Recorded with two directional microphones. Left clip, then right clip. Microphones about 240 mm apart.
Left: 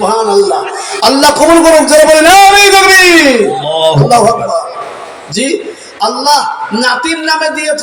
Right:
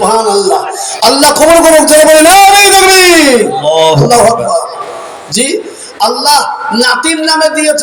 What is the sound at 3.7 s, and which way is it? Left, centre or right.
Speech, right.